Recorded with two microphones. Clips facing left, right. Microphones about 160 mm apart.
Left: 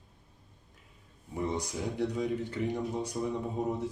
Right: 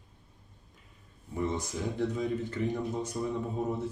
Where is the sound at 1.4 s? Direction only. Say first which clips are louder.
Right 1 dB; 15° left (ahead or behind).